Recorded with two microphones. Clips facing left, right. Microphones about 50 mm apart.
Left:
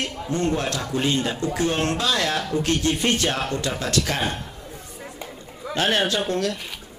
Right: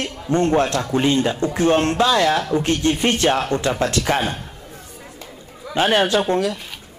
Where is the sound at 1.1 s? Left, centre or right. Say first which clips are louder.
Right 4 dB; centre.